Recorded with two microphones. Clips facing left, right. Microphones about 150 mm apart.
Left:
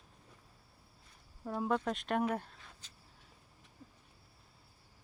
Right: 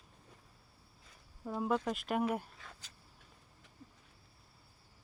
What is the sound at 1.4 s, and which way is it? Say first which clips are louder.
Speech: even; 5° right (ahead or behind).